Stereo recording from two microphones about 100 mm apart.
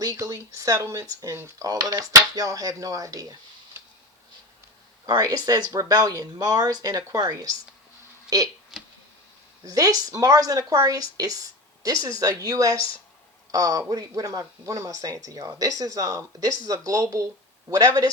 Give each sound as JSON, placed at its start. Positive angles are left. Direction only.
{"t": 0.0, "sound": "speech", "side_deg": -35}
{"t": 5.0, "sound": "speech", "side_deg": -40}
{"t": 8.7, "sound": "a sound", "side_deg": 0}
{"t": 9.6, "sound": "speech", "side_deg": -35}